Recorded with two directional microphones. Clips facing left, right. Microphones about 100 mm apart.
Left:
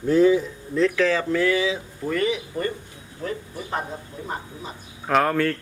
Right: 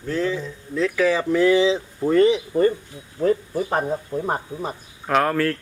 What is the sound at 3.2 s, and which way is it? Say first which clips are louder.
Speech: right 10 dB; 40° right (ahead or behind).